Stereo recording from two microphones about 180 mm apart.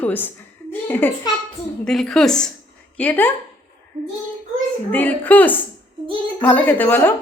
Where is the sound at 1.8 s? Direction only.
5° left (ahead or behind).